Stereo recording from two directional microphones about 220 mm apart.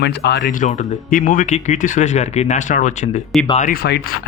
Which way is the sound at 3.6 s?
45° left (ahead or behind).